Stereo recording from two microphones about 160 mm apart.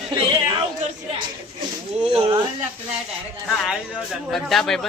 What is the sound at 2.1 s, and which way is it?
Speech, 35° right (ahead or behind).